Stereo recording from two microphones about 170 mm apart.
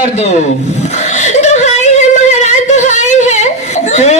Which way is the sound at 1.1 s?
45° left (ahead or behind).